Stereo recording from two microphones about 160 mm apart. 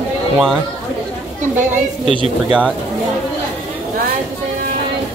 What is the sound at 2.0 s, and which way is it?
Speech, 35° right (ahead or behind).